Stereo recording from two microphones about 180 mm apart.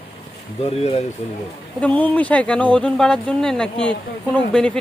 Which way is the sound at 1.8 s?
10° left (ahead or behind).